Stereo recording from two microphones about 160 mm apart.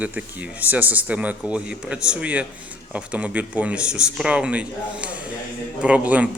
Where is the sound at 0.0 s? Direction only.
10° right (ahead or behind).